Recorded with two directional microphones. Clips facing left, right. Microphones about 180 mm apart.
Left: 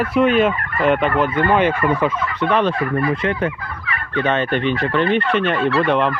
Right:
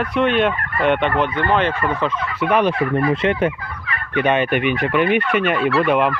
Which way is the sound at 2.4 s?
10° right (ahead or behind).